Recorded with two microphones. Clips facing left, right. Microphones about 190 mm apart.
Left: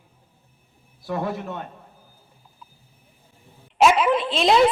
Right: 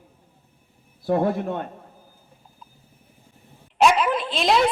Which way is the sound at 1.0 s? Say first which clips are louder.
Right 6 dB; 50° right (ahead or behind).